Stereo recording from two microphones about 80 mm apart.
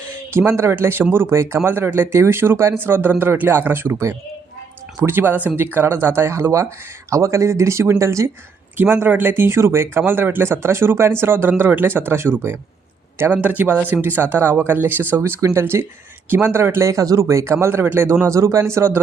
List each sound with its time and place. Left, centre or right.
0.3 s speech: right
8.8 s speech: right
13.3 s speech: centre